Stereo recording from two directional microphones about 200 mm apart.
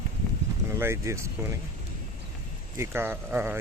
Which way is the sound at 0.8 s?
15° right (ahead or behind).